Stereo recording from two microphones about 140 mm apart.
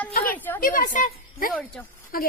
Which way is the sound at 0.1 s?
90° left.